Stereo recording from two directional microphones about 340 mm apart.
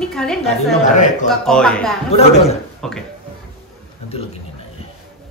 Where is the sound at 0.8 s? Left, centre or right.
Left.